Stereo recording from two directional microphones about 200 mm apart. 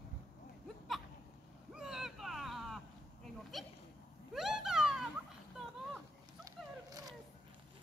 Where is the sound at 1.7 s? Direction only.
5° right (ahead or behind).